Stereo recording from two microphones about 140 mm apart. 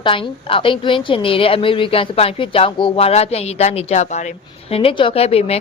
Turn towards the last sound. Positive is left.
turn(degrees=45)  # may be behind; listen again after turning